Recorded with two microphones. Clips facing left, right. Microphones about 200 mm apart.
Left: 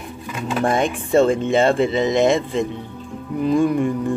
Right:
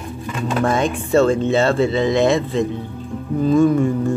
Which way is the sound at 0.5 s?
15° left (ahead or behind).